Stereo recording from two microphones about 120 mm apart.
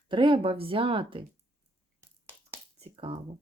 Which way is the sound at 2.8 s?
50° right (ahead or behind).